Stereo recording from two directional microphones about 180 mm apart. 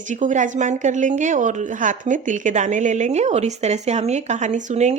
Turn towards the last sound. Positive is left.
turn(degrees=-40)  # may be behind; listen again after turning